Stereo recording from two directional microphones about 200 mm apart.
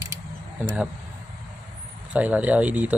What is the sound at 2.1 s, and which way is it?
Speech, 5° right (ahead or behind).